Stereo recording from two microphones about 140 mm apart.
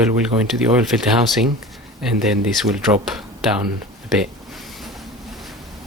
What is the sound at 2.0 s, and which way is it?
Speech, 5° right (ahead or behind).